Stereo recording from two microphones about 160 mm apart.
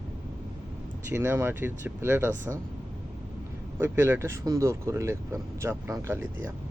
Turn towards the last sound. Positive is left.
turn(degrees=-15)  # may be behind; listen again after turning